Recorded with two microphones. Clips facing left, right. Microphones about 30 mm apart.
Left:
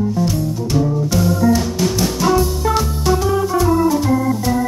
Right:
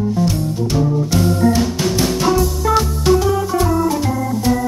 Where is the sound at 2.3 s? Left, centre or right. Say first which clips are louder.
Even; centre.